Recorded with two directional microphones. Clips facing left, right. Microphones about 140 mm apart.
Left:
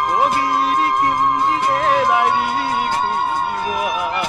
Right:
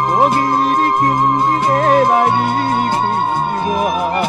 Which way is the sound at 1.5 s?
40° right (ahead or behind).